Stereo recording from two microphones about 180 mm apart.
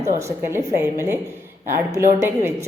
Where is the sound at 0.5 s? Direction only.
15° right (ahead or behind).